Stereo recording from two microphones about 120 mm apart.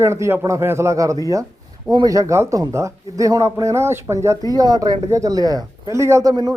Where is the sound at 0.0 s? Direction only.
20° right (ahead or behind).